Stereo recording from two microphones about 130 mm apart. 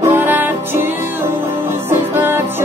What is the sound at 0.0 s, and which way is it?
Music, 15° right (ahead or behind).